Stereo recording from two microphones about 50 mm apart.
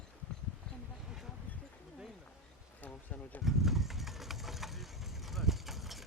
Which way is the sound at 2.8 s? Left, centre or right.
Left.